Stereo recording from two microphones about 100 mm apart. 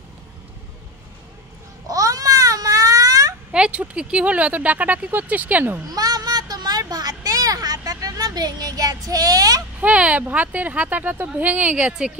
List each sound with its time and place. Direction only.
1.9 s babbling: 35° right (ahead or behind)
3.5 s speech: 10° right (ahead or behind)
5.9 s a sound: 40° right (ahead or behind)
9.8 s speech: 15° right (ahead or behind)